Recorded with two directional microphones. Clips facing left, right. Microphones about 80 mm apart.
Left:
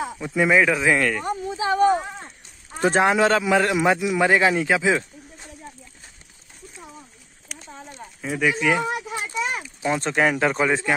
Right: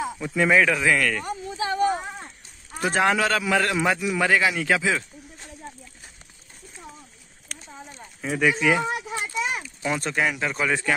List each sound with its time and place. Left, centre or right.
0.2 s a man's voice: centre
2.8 s a man's voice: left
7.4 s a sound: centre
8.2 s speech: centre
9.2 s a sound: centre
9.6 s speech: left
10.6 s a man's voice: left